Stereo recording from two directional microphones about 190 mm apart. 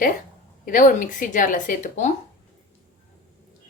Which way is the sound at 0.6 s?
45° left (ahead or behind).